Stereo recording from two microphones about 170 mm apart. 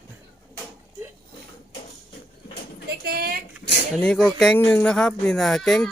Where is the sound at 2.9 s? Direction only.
65° right (ahead or behind).